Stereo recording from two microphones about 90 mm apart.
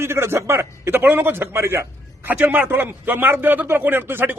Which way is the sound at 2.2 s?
20° right (ahead or behind).